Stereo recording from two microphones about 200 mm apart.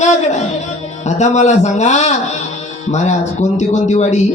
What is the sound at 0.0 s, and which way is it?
Speech, 35° left (ahead or behind).